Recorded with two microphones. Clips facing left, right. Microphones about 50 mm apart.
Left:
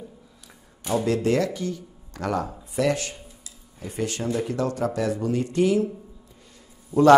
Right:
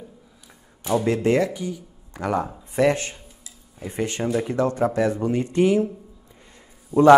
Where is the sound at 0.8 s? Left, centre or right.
Right.